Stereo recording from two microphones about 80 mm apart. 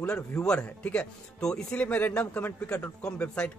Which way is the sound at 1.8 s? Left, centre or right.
Centre.